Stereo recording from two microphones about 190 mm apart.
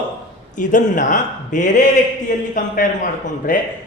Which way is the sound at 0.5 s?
40° left (ahead or behind).